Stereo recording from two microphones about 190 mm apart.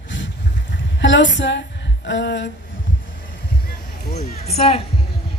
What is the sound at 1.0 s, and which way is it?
Speech, 70° left (ahead or behind).